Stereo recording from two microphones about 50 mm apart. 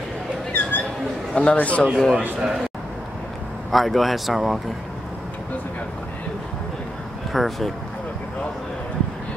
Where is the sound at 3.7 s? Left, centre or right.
Centre.